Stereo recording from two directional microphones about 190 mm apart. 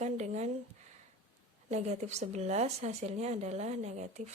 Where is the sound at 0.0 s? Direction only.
35° right (ahead or behind).